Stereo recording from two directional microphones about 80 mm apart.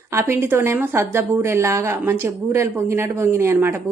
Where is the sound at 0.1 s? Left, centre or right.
Right.